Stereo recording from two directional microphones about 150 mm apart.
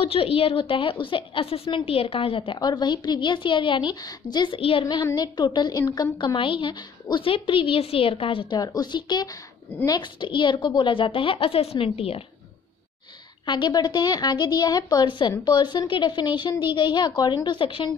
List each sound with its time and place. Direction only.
0.0 s a woman's voice: 40° left (ahead or behind); by 6.0 s 25° left (ahead or behind)
6.2 s a woman's voice: 35° left (ahead or behind)
13.5 s a woman's voice: 30° left (ahead or behind)